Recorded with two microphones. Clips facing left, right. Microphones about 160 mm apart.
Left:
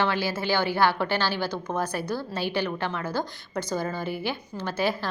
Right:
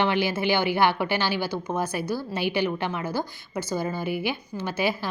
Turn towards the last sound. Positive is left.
turn(degrees=-10)  # may be behind; listen again after turning